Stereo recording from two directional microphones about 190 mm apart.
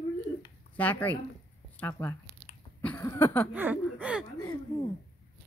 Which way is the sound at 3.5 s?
10° right (ahead or behind).